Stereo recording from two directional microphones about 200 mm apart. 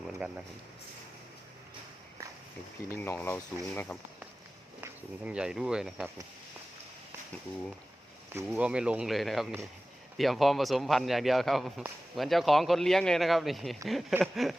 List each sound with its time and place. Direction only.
2.9 s speech: 10° left (ahead or behind)
4.8 s a man's voice: 5° right (ahead or behind)
8.4 s a man's voice: 5° right (ahead or behind)